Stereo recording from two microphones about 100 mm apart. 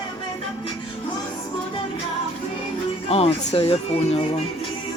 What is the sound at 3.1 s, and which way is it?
Speech, 80° left.